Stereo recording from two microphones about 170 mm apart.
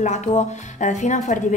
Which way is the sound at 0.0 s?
45° left (ahead or behind).